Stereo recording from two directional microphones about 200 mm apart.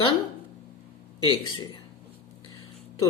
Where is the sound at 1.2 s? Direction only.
25° left (ahead or behind).